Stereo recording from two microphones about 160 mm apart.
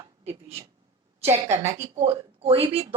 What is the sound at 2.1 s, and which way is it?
Speech, 35° right (ahead or behind).